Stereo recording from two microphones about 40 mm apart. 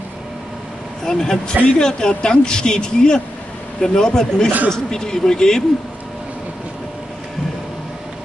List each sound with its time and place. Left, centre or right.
1.0 s speech: centre